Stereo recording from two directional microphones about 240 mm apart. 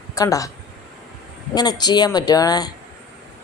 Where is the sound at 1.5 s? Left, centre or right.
Centre.